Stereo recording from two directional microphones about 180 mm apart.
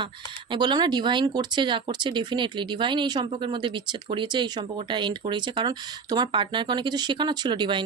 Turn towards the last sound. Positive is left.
turn(degrees=-25)  # may be behind; listen again after turning